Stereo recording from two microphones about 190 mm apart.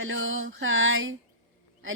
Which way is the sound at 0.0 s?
90° right.